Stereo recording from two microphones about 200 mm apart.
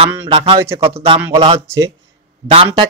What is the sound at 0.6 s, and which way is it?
Speech, 15° right (ahead or behind).